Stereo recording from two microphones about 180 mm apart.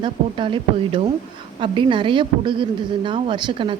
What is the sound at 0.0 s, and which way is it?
Speech, 25° right (ahead or behind).